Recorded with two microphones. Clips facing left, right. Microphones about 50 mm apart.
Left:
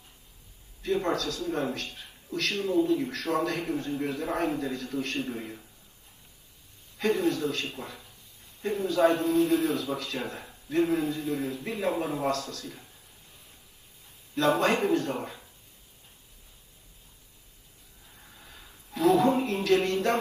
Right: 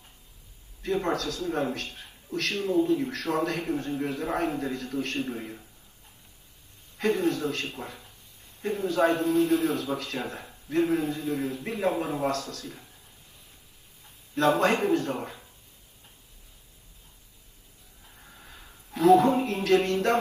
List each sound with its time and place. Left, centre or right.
0.8 s a man's voice: right
7.0 s a man's voice: right
14.6 s a man's voice: right
18.3 s a sound: right